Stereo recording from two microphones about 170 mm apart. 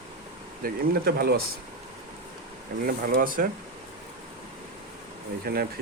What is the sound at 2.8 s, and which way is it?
Speech, 55° right (ahead or behind).